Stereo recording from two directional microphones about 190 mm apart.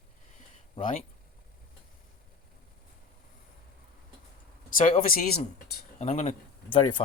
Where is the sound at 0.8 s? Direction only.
45° left (ahead or behind).